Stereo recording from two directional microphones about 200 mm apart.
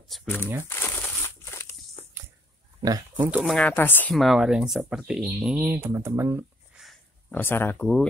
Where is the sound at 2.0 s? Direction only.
30° left (ahead or behind).